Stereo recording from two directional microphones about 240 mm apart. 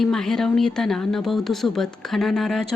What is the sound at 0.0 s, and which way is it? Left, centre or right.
Speech, centre.